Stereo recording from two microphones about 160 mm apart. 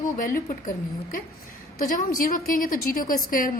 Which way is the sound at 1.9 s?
60° left (ahead or behind).